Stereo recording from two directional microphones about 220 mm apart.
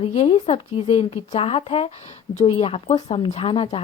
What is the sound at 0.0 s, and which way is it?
A woman's voice, 30° left (ahead or behind).